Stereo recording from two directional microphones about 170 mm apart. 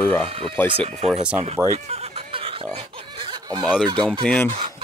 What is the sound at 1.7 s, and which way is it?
Snicker, 40° right (ahead or behind).